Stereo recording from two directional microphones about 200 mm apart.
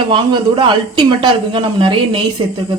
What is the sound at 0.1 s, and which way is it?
Speech, 25° right (ahead or behind).